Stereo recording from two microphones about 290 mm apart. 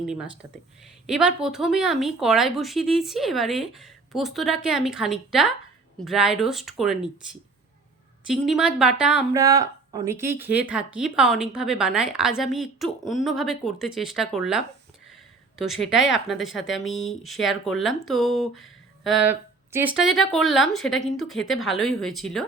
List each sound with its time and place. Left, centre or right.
1.0 s speech: centre
8.3 s speech: centre
16.0 s speech: left
16.2 s speech: centre